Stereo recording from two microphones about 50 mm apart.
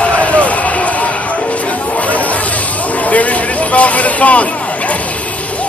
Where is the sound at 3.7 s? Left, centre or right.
Left.